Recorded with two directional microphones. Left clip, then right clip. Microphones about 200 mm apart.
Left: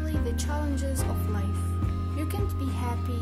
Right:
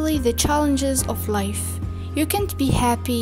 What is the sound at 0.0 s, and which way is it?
Speech, 45° right (ahead or behind).